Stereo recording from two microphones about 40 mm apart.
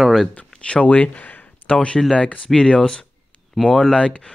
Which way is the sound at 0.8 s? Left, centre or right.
Left.